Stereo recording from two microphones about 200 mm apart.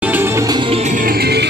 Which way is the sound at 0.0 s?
10° right (ahead or behind).